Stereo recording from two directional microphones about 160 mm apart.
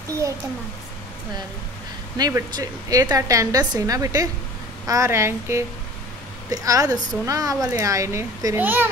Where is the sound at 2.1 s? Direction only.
25° right (ahead or behind).